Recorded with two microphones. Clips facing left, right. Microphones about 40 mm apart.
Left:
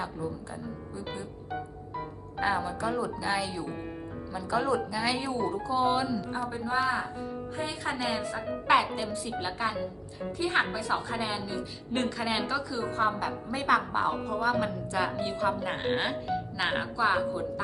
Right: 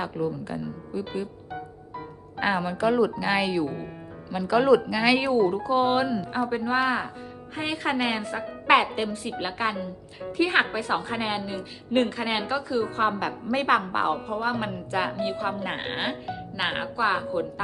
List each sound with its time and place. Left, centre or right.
0.0 s speech: right
2.4 s a woman's voice: right
5.4 s a woman's voice: right
13.0 s a woman's voice: right
15.3 s speech: right